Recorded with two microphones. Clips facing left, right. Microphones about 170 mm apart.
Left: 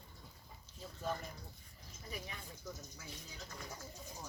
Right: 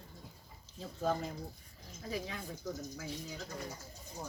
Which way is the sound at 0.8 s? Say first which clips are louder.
Right 7 dB; 90° right.